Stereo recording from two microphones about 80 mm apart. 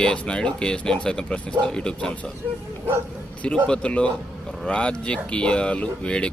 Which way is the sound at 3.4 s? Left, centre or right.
Centre.